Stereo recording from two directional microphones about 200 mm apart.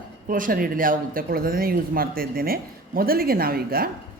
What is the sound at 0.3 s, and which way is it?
Speech, 45° right (ahead or behind).